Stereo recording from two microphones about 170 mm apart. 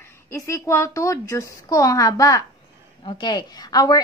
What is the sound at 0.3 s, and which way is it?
A woman's voice, 15° left (ahead or behind).